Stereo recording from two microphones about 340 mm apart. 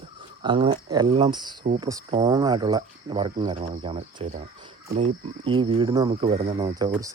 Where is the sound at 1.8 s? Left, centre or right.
Centre.